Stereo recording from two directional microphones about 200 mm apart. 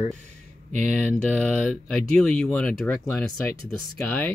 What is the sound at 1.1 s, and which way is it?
Speech, 5° left (ahead or behind).